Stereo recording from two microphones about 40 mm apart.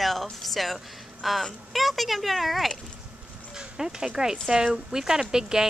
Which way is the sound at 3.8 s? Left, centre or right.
Centre.